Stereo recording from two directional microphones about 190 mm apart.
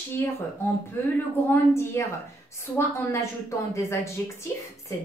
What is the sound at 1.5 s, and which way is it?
Speech, 15° left (ahead or behind).